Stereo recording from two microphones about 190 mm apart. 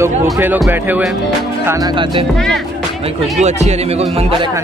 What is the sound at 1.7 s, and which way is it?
Music, 20° right (ahead or behind).